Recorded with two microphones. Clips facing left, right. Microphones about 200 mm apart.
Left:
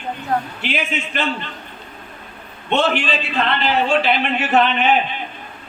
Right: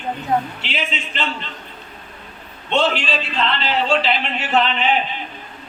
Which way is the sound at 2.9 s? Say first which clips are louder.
Left 2 dB; 55° left (ahead or behind).